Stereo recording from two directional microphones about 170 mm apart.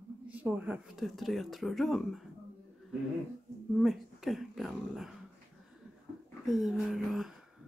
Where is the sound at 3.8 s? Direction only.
Centre (ahead or behind).